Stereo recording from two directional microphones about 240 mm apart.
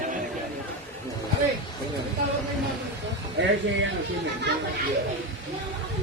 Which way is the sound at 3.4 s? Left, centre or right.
Right.